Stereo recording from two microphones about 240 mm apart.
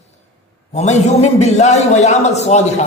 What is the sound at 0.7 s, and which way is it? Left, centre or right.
A man's voice, left.